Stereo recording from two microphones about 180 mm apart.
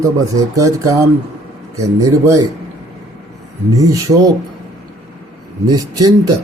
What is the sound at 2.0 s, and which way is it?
Speech, 15° right (ahead or behind).